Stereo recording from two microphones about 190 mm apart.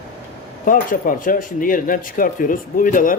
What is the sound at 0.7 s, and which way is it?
Speech, 45° left (ahead or behind).